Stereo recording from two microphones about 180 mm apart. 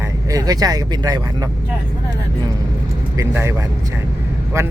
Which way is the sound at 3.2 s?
15° right (ahead or behind).